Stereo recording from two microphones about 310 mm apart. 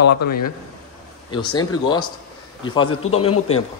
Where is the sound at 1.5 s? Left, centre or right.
Centre.